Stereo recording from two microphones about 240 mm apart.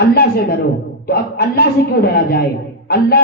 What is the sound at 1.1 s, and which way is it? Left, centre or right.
A man's voice, left.